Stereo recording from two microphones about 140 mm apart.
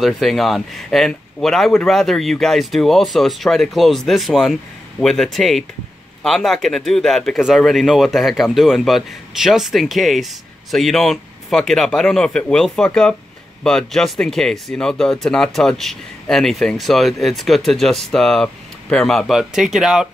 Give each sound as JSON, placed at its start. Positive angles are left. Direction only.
{"t": 0.0, "sound": "speech", "side_deg": 0}